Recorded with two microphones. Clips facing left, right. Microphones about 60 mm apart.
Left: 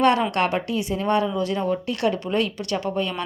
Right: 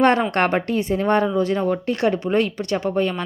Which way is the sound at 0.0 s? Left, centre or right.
Right.